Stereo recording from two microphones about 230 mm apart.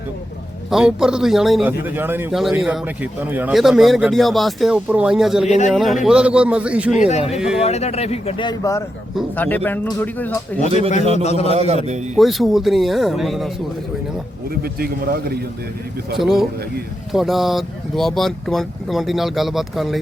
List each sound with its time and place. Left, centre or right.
0.7 s speech: centre
5.5 s a man's voice: left
5.7 s speech: centre
7.1 s speech: left
7.3 s speech: centre
7.6 s speech: left; by 10.3 s centre
10.7 s a man's voice: right
11.2 s speech: left
11.5 s a man's voice: right
12.1 s speech: centre
14.6 s a man's voice: right
16.1 s speech: centre